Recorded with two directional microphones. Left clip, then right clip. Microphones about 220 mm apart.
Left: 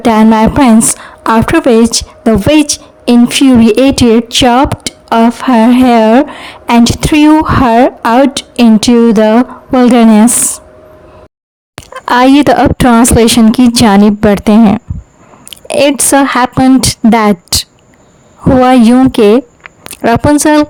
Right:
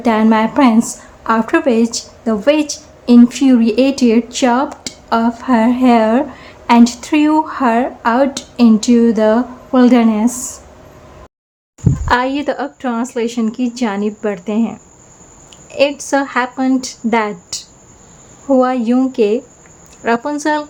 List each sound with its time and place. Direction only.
0.0 s a woman's voice: 45° left (ahead or behind)
12.0 s a woman's voice: 45° left (ahead or behind)
15.4 s a sound: 45° left (ahead or behind)
16.0 s a woman's voice: 45° left (ahead or behind)